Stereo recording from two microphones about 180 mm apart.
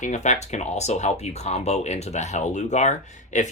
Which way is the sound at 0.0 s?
40° left (ahead or behind).